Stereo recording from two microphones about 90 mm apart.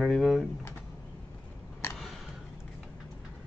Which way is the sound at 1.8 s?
30° left (ahead or behind).